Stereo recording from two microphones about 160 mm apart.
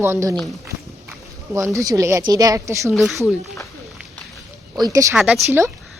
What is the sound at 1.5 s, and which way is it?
Speech, 20° right (ahead or behind).